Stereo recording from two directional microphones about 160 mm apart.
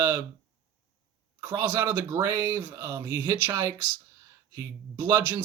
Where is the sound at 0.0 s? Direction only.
15° right (ahead or behind).